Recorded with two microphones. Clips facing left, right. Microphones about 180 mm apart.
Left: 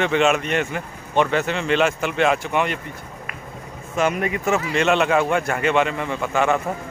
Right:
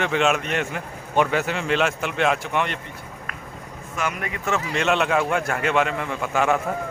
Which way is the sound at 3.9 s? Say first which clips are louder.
Left 7 dB; 25° left (ahead or behind).